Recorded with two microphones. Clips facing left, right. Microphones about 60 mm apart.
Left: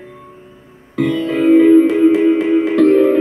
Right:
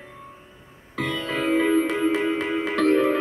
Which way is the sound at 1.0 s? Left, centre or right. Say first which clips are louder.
Left 11 dB; centre.